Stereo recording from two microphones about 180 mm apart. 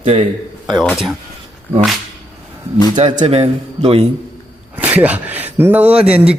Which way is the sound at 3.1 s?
35° right (ahead or behind).